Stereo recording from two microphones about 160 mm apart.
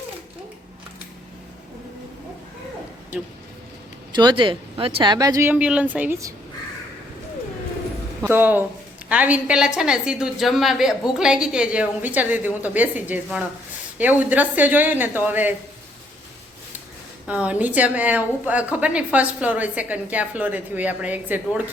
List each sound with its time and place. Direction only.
4.1 s speech: 30° right (ahead or behind)
8.2 s a woman's voice: 10° right (ahead or behind)
17.2 s a woman's voice: 10° right (ahead or behind)